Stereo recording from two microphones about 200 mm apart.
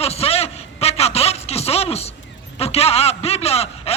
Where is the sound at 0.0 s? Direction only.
30° left (ahead or behind).